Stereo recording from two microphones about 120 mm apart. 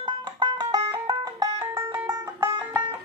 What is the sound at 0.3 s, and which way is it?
Music, 35° right (ahead or behind).